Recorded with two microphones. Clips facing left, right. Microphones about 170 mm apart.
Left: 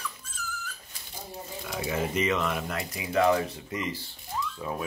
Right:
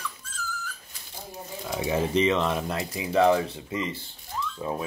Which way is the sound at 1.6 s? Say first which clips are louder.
Right 4 dB; 25° right (ahead or behind).